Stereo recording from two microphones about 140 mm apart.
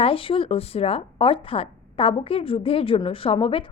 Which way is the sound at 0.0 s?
40° left (ahead or behind).